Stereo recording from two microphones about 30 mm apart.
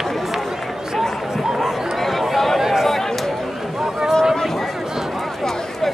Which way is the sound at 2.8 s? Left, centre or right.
Centre.